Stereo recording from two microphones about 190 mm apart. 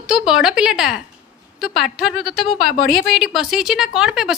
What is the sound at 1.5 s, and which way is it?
A woman's voice, centre (ahead or behind).